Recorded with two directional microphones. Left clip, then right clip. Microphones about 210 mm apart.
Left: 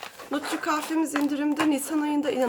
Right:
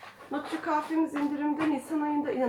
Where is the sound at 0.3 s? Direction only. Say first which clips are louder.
Left 4 dB; 35° left (ahead or behind).